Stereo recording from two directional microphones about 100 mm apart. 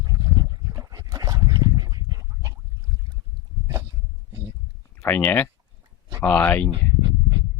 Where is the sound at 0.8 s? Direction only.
40° right (ahead or behind).